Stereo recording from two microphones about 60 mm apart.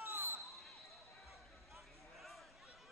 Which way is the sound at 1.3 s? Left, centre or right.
Centre.